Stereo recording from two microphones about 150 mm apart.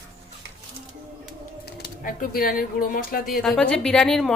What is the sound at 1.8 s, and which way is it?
Speech, 75° left (ahead or behind).